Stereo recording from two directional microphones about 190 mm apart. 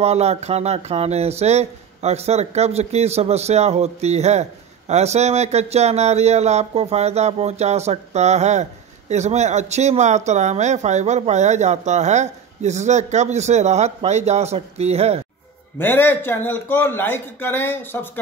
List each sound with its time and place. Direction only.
0.0 s speech: 35° right (ahead or behind)
15.8 s a man's voice: 10° left (ahead or behind)